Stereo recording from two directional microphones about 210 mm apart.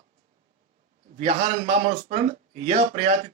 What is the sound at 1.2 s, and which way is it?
Speech, 30° right (ahead or behind).